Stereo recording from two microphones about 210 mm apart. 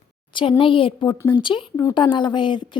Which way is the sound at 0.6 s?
25° left (ahead or behind).